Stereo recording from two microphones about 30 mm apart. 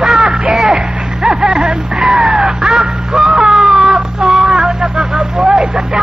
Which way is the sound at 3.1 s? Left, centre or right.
Right.